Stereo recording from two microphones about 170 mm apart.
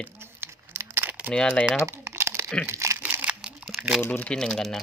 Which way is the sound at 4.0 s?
10° left (ahead or behind).